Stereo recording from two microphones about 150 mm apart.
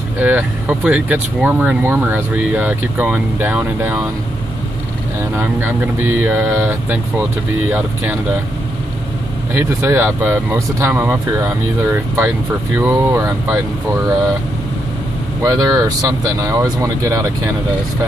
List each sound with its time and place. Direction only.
0.2 s speech: 10° right (ahead or behind)
5.3 s speech: 15° right (ahead or behind)
9.5 s speech: 15° right (ahead or behind)
15.4 s speech: 25° right (ahead or behind)